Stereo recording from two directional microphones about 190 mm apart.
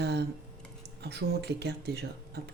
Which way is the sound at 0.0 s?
60° right (ahead or behind).